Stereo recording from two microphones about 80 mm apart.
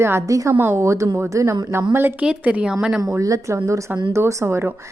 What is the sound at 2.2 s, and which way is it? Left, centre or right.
Speech, centre.